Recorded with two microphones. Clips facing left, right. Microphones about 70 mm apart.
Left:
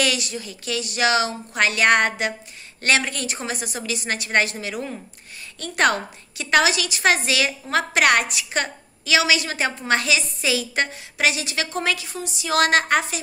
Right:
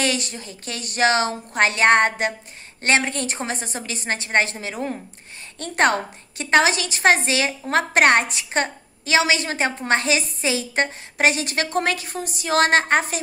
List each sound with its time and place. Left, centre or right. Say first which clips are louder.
0.0 s a woman's voice: even; right